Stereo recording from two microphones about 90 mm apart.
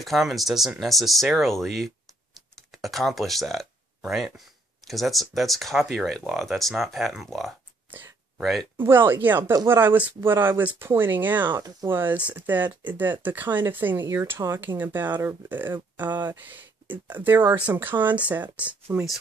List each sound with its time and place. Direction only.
0.0 s speech: centre (ahead or behind)
8.7 s speech: 25° right (ahead or behind)